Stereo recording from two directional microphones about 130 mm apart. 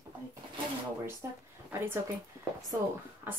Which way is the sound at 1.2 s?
20° right (ahead or behind).